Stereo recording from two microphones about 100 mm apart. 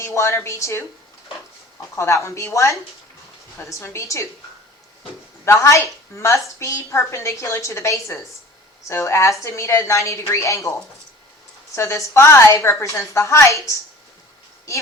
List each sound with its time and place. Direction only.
0.0 s a woman's voice: 30° left (ahead or behind)
2.0 s a woman's voice: 30° left (ahead or behind)
5.5 s a woman's voice: 30° left (ahead or behind)